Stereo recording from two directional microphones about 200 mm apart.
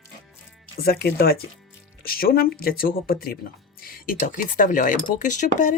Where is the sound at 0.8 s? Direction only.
50° left (ahead or behind).